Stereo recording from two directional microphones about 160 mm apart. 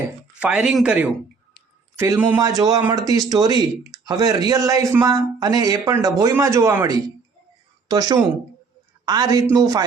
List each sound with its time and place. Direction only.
0.3 s speech: 5° right (ahead or behind)
2.4 s speech: 25° right (ahead or behind)